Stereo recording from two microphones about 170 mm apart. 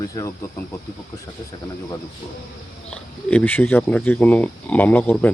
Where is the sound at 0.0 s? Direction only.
20° left (ahead or behind).